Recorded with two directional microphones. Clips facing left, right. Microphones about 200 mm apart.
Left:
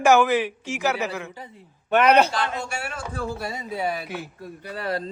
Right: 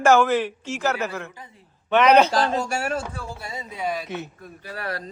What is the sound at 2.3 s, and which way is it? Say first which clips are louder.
Speech: right 5 dB; 35° right (ahead or behind).